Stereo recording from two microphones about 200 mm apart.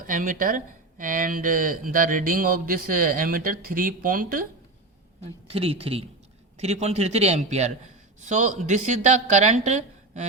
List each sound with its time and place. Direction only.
0.1 s speech: 40° right (ahead or behind)
5.5 s a woman's voice: 30° right (ahead or behind)